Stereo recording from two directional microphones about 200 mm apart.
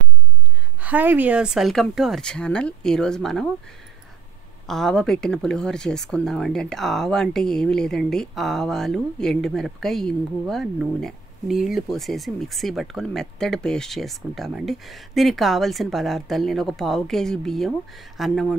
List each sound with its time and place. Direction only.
0.7 s speech: 10° right (ahead or behind)
4.6 s speech: centre (ahead or behind)